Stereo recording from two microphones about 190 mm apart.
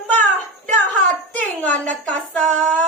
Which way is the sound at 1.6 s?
5° left (ahead or behind).